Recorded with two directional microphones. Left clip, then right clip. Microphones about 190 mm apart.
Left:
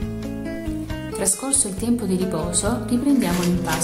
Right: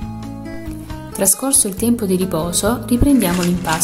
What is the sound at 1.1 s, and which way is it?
A woman's voice, 30° right (ahead or behind).